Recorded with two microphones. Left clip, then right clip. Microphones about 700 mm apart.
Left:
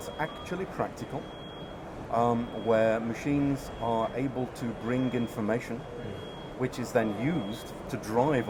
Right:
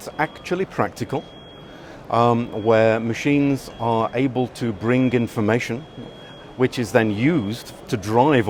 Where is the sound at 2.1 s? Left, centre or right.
Right.